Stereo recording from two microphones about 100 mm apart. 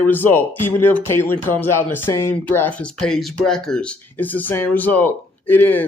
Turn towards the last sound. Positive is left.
turn(degrees=20)  # may be behind; listen again after turning